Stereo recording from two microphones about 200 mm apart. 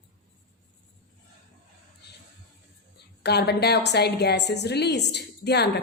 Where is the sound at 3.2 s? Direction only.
55° left (ahead or behind).